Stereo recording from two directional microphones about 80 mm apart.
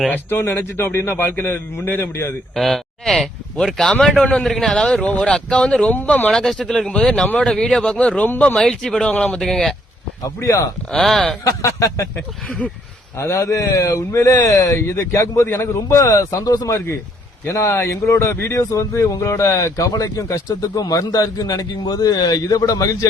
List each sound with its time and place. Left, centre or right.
0.1 s a man's voice: left
2.6 s speech: centre
5.9 s a man's voice: left
6.3 s speech: centre
10.2 s speech: left
10.9 s speech: centre
11.4 s speech: left
12.5 s speech: centre
13.1 s speech: left
20.5 s a man's voice: left